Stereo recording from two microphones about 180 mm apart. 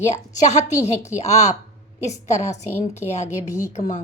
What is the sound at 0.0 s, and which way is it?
A woman's voice, 40° left (ahead or behind).